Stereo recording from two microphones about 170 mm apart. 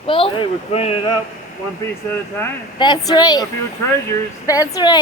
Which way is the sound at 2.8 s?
25° left (ahead or behind).